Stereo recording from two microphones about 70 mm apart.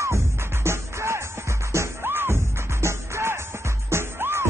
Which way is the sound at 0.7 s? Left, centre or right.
Right.